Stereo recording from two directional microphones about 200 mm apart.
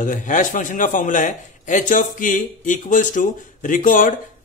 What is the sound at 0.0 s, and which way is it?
A man's voice, 40° left (ahead or behind).